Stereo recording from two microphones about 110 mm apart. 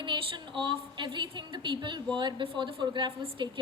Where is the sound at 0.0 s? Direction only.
45° right (ahead or behind).